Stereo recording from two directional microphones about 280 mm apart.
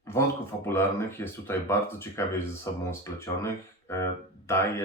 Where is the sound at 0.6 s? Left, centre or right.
Centre.